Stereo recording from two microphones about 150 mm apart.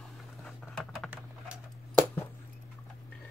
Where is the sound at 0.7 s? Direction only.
Centre (ahead or behind).